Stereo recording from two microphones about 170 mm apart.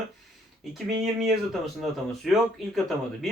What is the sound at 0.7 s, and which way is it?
Speech, centre (ahead or behind).